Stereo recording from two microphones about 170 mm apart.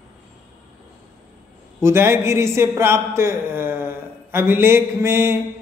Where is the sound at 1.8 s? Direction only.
15° right (ahead or behind).